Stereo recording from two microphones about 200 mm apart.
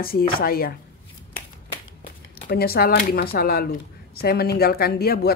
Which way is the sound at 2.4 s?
50° left (ahead or behind).